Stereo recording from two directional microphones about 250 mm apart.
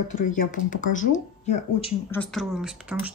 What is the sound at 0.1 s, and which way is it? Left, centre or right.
Speech, left.